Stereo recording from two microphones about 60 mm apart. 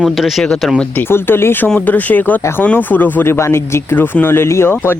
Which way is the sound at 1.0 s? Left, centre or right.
Left.